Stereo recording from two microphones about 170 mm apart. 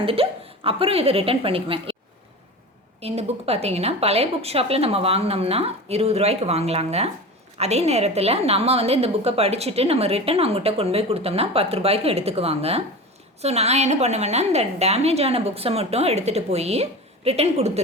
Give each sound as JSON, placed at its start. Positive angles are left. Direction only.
{"t": 0.0, "sound": "a woman's voice", "side_deg": -35}
{"t": 3.0, "sound": "a woman's voice", "side_deg": -35}